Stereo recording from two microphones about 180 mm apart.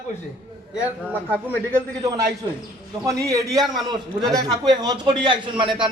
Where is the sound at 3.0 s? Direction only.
15° right (ahead or behind).